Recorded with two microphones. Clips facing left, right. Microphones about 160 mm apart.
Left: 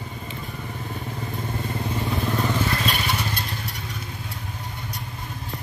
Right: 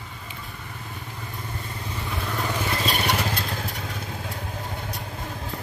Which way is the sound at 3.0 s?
90° right.